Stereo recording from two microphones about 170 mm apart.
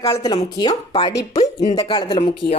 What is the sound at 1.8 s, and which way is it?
Speech, 30° left (ahead or behind).